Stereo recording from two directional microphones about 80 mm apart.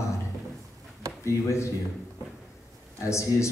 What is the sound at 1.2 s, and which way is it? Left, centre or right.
Speech, left.